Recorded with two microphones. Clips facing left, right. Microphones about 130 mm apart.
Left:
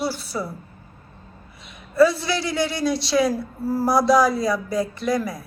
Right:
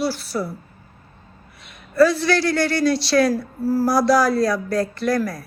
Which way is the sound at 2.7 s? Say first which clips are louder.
Right 4 dB; 70° right (ahead or behind).